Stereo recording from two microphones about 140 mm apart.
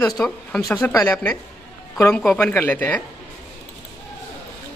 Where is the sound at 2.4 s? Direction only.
15° left (ahead or behind).